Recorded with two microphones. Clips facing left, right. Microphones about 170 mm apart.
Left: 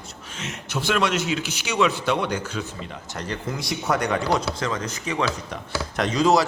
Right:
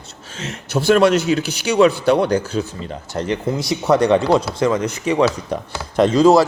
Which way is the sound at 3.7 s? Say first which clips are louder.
Right 9 dB; 25° right (ahead or behind).